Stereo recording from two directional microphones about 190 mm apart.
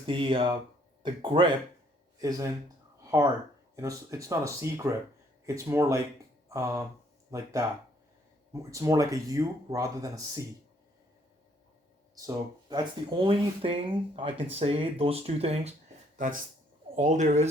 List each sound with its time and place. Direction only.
0.0 s speech: 25° right (ahead or behind)
3.0 s a sound: 15° right (ahead or behind)
3.8 s speech: 15° right (ahead or behind)
12.1 s speech: 20° right (ahead or behind)
16.1 s speech: 45° right (ahead or behind)